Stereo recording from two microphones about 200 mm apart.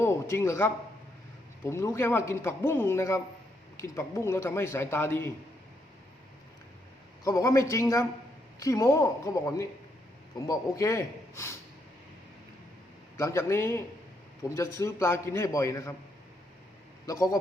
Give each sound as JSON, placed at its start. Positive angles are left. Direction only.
{"t": 0.0, "sound": "a sound", "side_deg": 15}
{"t": 1.6, "sound": "a man's voice", "side_deg": 15}
{"t": 7.3, "sound": "a man's voice", "side_deg": 15}
{"t": 13.1, "sound": "a man's voice", "side_deg": 15}
{"t": 17.1, "sound": "a man's voice", "side_deg": 15}